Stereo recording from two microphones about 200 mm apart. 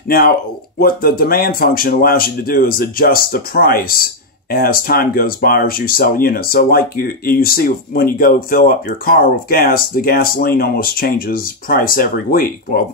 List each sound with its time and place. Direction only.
0.7 s speech: 45° left (ahead or behind)